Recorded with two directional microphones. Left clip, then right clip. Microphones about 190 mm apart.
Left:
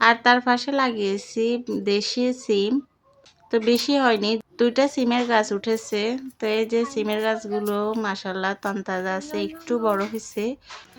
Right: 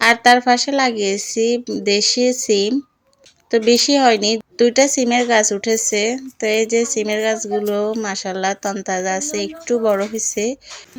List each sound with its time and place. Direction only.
0.0 s speech: 20° right (ahead or behind)